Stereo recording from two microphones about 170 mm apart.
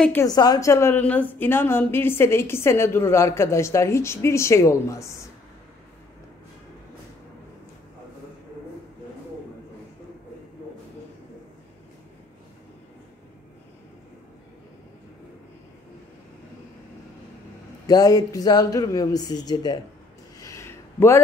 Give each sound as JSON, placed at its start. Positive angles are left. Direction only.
{"t": 0.0, "sound": "a woman's voice", "side_deg": 15}
{"t": 17.8, "sound": "speech", "side_deg": 20}
{"t": 20.3, "sound": "a sound", "side_deg": 15}